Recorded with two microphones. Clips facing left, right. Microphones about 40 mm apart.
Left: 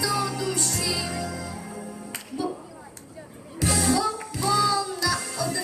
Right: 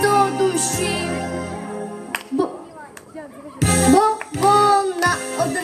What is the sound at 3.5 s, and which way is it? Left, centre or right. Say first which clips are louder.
Music: right 9 dB; right.